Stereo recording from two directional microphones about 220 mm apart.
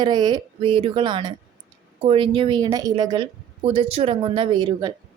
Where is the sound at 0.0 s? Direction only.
20° right (ahead or behind).